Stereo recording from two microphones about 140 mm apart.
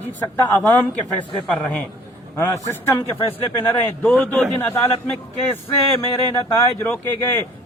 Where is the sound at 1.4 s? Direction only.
5° left (ahead or behind).